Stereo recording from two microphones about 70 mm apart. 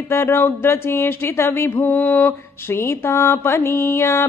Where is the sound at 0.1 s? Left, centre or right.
Left.